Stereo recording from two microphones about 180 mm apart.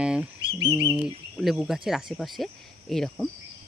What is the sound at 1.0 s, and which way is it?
Speech, centre (ahead or behind).